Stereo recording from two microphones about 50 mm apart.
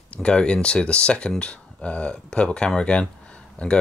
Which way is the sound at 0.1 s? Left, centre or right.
Centre.